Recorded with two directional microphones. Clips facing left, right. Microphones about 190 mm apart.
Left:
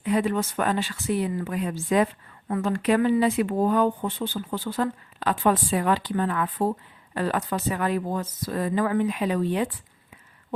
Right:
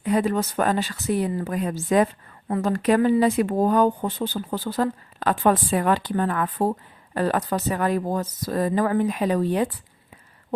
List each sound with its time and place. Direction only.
0.0 s speech: 40° right (ahead or behind)